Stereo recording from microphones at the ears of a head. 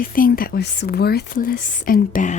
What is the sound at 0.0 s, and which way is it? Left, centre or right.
Speech, left.